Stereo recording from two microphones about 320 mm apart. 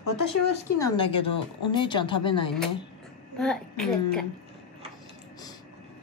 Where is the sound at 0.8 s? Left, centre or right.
Centre.